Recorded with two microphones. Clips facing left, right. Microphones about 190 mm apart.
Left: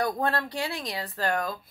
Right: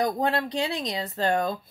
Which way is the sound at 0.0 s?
15° right (ahead or behind).